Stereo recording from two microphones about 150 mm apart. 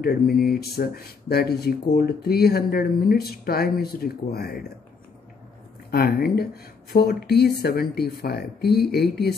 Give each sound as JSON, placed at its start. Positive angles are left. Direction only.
{"t": 0.0, "sound": "speech", "side_deg": 90}
{"t": 5.9, "sound": "speech", "side_deg": 90}